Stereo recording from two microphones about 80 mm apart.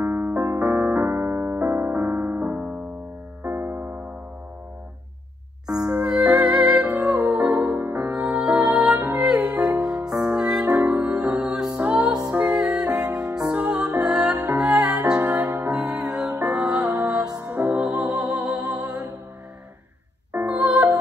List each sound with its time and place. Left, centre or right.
0.0 s keyboard: right
3.4 s music: right
5.9 s music: centre
8.1 s music: centre
16.9 s music: right
17.5 s music: centre
17.9 s music: right
18.4 s music: centre
20.4 s music: centre